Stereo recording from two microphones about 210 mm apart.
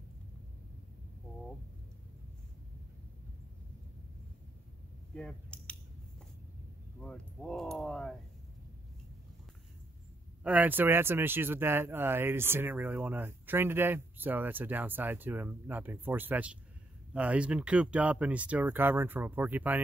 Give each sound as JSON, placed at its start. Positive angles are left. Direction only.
{"t": 5.1, "sound": "a sound", "side_deg": 5}
{"t": 7.0, "sound": "speech", "side_deg": 5}
{"t": 10.4, "sound": "speech", "side_deg": -5}